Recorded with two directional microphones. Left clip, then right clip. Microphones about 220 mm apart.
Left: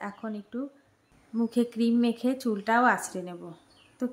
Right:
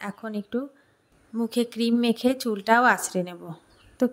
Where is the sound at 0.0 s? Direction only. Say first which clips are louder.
Right 3 dB; 35° right (ahead or behind).